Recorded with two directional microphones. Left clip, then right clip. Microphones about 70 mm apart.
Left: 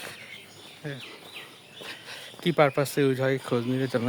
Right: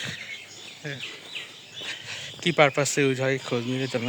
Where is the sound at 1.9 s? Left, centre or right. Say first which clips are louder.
Right 5 dB; left.